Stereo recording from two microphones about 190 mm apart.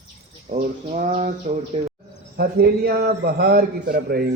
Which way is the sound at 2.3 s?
55° right (ahead or behind).